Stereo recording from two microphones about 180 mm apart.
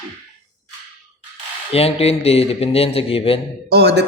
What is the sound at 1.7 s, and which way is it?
A man's voice, 35° left (ahead or behind).